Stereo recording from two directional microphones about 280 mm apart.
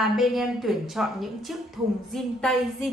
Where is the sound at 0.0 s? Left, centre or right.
Centre.